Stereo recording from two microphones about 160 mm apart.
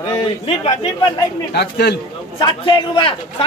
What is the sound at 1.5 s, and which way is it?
Speech, 90° left.